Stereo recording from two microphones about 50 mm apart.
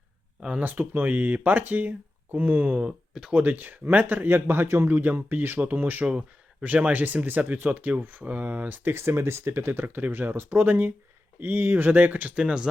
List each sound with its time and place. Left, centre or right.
0.6 s speech: right
2.8 s speech: centre
3.3 s speech: right
6.1 s speech: right
9.0 s speech: right
12.3 s speech: right